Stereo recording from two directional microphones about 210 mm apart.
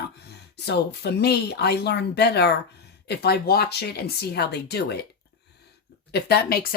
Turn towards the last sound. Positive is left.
turn(degrees=50)  # may be behind; listen again after turning